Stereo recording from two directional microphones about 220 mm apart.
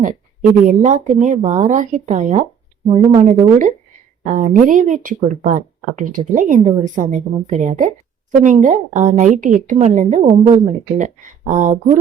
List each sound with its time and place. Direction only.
0.6 s speech: 35° right (ahead or behind)